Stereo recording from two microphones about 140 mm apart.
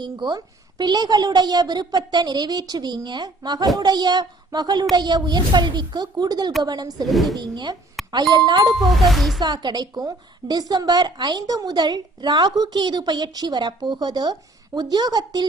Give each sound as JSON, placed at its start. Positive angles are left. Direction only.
{"t": 0.0, "sound": "a woman's voice", "side_deg": -30}
{"t": 7.1, "sound": "speech", "side_deg": 0}
{"t": 7.3, "sound": "a woman's voice", "side_deg": -30}
{"t": 8.8, "sound": "speech", "side_deg": 0}
{"t": 9.4, "sound": "a woman's voice", "side_deg": -30}